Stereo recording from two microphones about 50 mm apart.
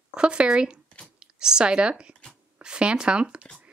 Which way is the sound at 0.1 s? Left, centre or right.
Right.